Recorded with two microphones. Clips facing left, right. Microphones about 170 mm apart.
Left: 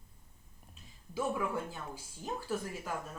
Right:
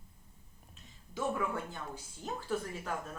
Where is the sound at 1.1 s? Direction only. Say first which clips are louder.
Left 1 dB; 10° left (ahead or behind).